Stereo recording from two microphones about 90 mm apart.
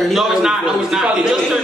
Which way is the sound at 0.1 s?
5° right (ahead or behind).